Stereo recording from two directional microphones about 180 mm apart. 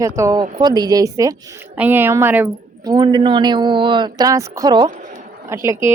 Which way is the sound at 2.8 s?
20° right (ahead or behind).